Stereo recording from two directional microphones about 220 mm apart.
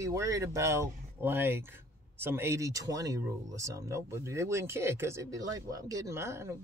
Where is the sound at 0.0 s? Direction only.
15° right (ahead or behind).